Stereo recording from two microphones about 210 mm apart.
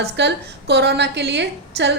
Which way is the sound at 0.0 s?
55° right (ahead or behind).